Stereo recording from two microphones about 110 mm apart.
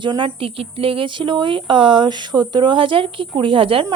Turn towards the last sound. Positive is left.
turn(degrees=-55)  # may be behind; listen again after turning